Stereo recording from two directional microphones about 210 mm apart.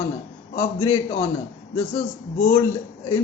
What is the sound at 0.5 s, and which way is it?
Speech, 20° left (ahead or behind).